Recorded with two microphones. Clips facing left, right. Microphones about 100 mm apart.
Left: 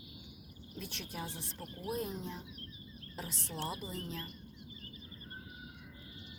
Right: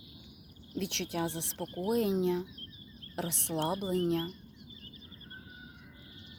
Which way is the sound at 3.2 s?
65° right (ahead or behind).